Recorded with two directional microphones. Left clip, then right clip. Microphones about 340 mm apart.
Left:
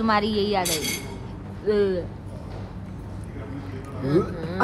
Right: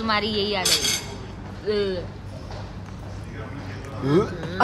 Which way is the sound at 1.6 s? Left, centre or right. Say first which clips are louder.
Left 2 dB; centre.